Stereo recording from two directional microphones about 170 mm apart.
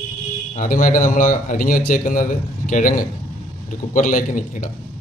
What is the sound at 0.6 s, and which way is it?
Speech, 50° left (ahead or behind).